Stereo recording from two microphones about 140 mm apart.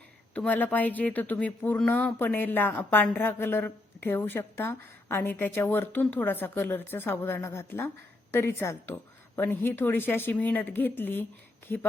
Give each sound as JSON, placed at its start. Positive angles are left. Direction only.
{"t": 0.3, "sound": "speech", "side_deg": 10}